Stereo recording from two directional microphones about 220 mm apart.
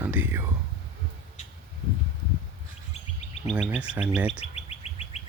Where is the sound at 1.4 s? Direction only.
35° left (ahead or behind).